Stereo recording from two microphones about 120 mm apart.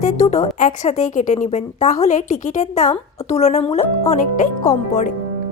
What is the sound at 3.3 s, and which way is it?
A woman's voice, 70° left (ahead or behind).